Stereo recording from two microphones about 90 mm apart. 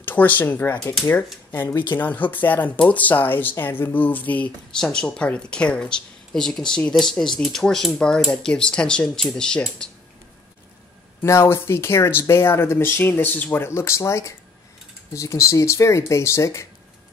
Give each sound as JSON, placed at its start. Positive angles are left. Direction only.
{"t": 0.0, "sound": "speech", "side_deg": 20}
{"t": 4.7, "sound": "speech", "side_deg": 5}
{"t": 11.2, "sound": "speech", "side_deg": 30}